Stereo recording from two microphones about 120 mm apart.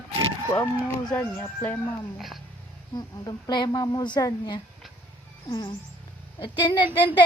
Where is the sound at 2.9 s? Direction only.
35° left (ahead or behind).